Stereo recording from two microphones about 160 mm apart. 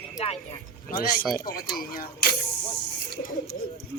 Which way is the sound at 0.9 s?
60° left (ahead or behind).